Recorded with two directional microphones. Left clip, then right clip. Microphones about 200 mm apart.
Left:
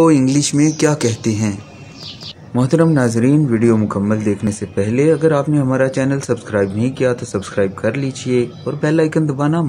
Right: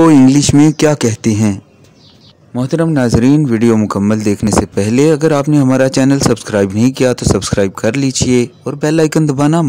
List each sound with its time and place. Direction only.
0.0 s speech: 50° right (ahead or behind)
2.5 s speech: 30° right (ahead or behind); by 9.7 s 55° right (ahead or behind)